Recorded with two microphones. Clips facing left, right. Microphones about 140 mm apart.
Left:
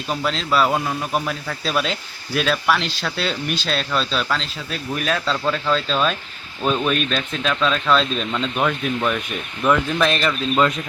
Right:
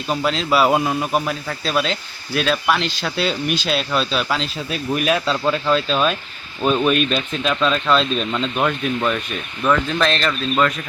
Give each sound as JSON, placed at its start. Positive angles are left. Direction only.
{"t": 0.1, "sound": "speech", "side_deg": -5}
{"t": 9.6, "sound": "speech", "side_deg": 10}